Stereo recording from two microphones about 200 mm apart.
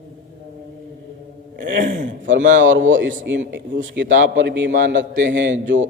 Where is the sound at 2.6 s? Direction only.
70° right (ahead or behind).